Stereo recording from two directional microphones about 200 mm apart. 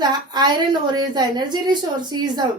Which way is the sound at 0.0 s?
20° right (ahead or behind).